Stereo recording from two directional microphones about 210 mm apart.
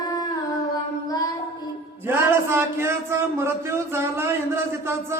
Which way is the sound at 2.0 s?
10° right (ahead or behind).